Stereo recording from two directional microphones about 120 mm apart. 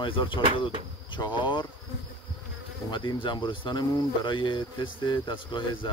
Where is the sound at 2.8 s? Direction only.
45° left (ahead or behind).